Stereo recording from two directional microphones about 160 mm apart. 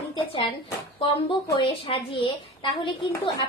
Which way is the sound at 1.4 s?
30° left (ahead or behind).